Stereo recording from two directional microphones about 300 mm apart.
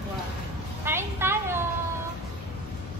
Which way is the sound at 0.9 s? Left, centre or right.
Centre.